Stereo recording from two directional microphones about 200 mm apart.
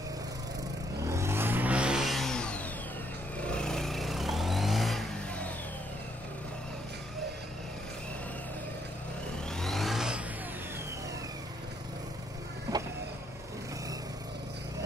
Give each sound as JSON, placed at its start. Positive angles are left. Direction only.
{"t": 1.0, "sound": "vehicle", "side_deg": -15}
{"t": 9.5, "sound": "vehicle", "side_deg": 0}
{"t": 12.7, "sound": "vehicle", "side_deg": -15}